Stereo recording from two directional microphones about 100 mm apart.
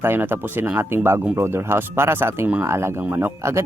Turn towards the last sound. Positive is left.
turn(degrees=-25)  # may be behind; listen again after turning